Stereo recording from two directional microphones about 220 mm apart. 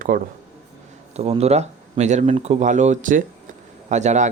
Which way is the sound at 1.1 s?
30° right (ahead or behind).